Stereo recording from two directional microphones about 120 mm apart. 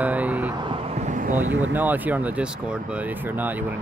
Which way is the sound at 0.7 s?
60° right (ahead or behind).